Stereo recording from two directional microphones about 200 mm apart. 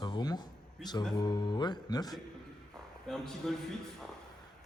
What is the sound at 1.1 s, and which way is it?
Speech, 20° left (ahead or behind).